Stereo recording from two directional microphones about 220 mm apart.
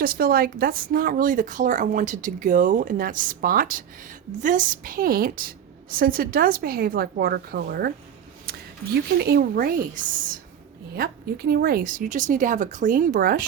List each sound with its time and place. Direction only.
0.0 s speech: 40° right (ahead or behind)
8.5 s a sound: 45° right (ahead or behind)
9.1 s speech: 45° right (ahead or behind)